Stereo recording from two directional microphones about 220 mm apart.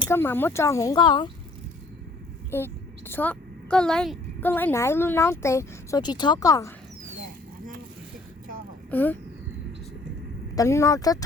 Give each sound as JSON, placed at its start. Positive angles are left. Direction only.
{"t": 0.1, "sound": "a woman's voice", "side_deg": 10}
{"t": 2.5, "sound": "a woman's voice", "side_deg": 10}
{"t": 8.9, "sound": "speech", "side_deg": 10}
{"t": 10.5, "sound": "a woman's voice", "side_deg": 15}